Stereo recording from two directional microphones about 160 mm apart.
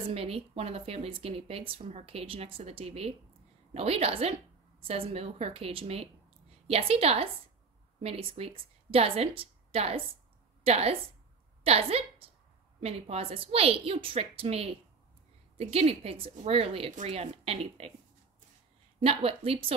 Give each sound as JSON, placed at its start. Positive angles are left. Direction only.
{"t": 0.1, "sound": "a woman's voice", "side_deg": -40}
{"t": 18.9, "sound": "speech", "side_deg": -35}